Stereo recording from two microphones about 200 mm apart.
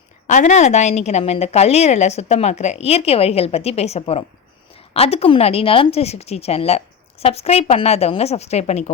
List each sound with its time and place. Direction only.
0.3 s a woman's voice: 35° left (ahead or behind)